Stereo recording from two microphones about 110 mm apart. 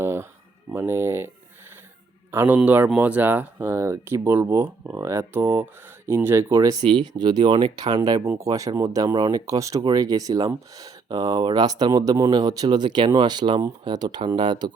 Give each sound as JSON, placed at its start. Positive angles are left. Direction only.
{"t": 0.0, "sound": "a sound", "side_deg": -25}
{"t": 0.7, "sound": "speech", "side_deg": -20}
{"t": 2.3, "sound": "a man's voice", "side_deg": -20}
{"t": 6.8, "sound": "speech", "side_deg": -40}